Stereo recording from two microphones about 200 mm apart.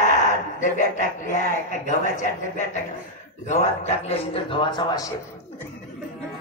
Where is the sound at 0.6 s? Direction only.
40° left (ahead or behind); by 5.1 s 20° left (ahead or behind).